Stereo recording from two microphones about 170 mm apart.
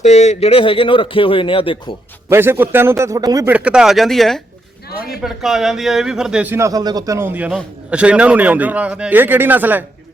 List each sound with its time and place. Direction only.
0.0 s speech: 40° left (ahead or behind)
2.3 s speech: 15° right (ahead or behind)
3.5 s speech: 5° right (ahead or behind)